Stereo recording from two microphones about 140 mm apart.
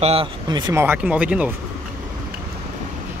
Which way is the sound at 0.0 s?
45° right (ahead or behind).